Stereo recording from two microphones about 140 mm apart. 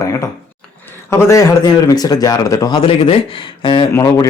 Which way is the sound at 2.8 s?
40° left (ahead or behind).